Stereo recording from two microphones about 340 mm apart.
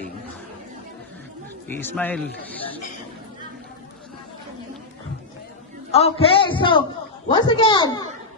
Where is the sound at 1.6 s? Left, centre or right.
Centre.